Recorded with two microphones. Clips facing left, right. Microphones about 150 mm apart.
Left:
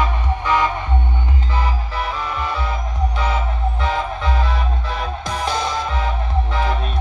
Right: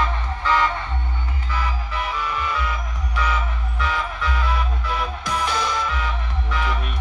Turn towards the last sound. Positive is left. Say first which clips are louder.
# left 2 dB
turn(degrees=30)  # may be behind; listen again after turning